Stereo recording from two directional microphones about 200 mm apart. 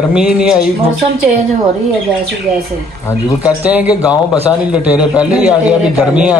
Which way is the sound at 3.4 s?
5° right (ahead or behind).